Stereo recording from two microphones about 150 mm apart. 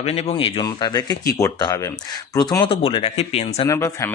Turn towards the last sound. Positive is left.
turn(degrees=20)  # may be behind; listen again after turning